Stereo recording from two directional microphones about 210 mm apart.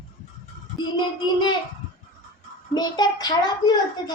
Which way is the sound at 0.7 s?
20° left (ahead or behind).